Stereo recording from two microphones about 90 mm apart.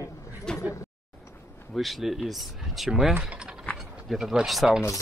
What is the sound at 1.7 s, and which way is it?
Speech, centre (ahead or behind).